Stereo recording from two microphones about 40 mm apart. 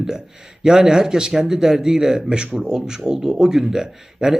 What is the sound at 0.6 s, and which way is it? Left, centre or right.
A man's voice, centre.